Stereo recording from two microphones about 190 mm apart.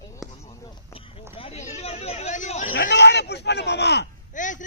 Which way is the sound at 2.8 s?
65° left (ahead or behind).